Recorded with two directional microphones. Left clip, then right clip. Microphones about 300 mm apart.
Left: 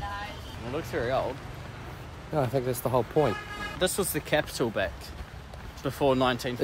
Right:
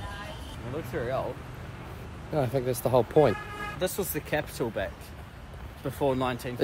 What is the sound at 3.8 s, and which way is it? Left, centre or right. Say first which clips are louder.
Speech: left 3 dB; centre.